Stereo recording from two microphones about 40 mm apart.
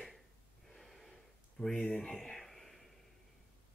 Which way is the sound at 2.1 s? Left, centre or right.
Centre.